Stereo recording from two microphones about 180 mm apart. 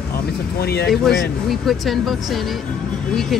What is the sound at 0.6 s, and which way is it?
Speech, 65° left (ahead or behind).